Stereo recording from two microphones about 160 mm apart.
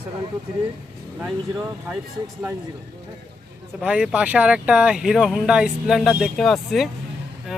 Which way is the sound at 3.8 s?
5° right (ahead or behind).